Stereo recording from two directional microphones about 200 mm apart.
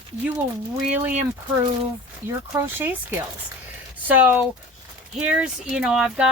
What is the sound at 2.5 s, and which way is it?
Speech, 10° right (ahead or behind).